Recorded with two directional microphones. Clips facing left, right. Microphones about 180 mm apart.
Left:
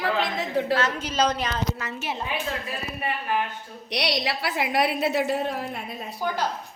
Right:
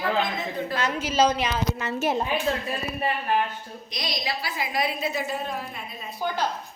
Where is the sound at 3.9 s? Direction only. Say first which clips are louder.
Left 5 dB; 75° left (ahead or behind).